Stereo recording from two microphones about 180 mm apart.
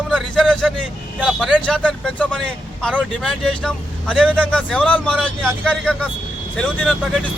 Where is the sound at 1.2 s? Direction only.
Centre (ahead or behind).